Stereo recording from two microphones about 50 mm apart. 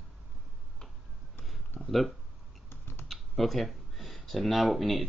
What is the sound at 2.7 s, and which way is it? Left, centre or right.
Typing, left.